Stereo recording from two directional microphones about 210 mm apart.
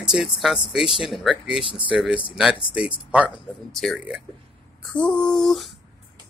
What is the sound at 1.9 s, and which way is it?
Speech, 5° right (ahead or behind).